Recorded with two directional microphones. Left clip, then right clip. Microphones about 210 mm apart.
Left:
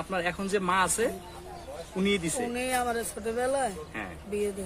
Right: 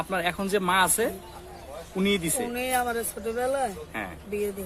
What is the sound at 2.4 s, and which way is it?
Speech, centre (ahead or behind).